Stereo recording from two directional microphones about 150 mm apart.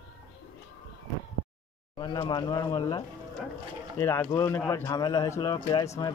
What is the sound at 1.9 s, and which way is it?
Speech, 30° left (ahead or behind).